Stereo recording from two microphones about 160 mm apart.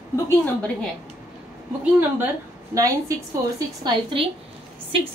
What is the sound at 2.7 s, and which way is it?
A woman's voice, 20° right (ahead or behind).